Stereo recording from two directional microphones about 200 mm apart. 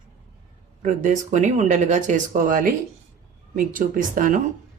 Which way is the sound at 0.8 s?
40° right (ahead or behind).